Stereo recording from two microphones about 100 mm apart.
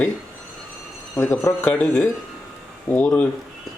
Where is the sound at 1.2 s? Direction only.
25° left (ahead or behind).